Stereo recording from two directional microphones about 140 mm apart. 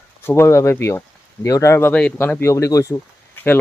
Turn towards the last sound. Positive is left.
turn(degrees=15)  # may be behind; listen again after turning